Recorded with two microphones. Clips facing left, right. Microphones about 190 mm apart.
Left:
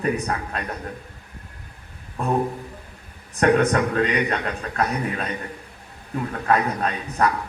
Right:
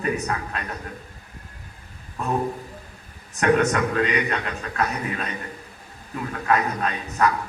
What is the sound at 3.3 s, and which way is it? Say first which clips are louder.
A man's voice: left 2 dB; 35° left (ahead or behind).